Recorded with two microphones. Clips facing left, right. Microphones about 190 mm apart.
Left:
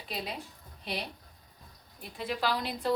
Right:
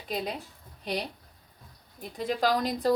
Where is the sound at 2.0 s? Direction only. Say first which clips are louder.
Right 5 dB; 45° right (ahead or behind).